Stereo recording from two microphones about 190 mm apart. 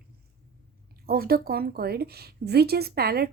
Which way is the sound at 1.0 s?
55° right (ahead or behind).